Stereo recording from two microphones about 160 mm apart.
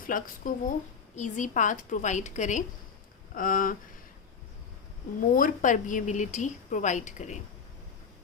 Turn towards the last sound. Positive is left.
turn(degrees=50)  # may be behind; listen again after turning